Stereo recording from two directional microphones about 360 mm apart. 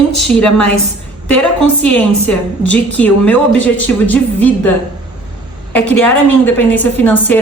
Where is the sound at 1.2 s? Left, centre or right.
Left.